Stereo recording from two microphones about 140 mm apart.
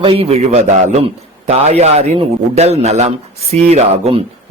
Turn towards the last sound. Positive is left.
turn(degrees=-50)  # may be behind; listen again after turning